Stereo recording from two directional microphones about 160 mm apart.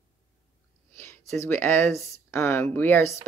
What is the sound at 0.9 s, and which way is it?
Speech, 15° left (ahead or behind).